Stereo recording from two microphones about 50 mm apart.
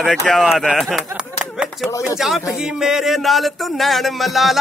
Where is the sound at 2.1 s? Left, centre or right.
Centre.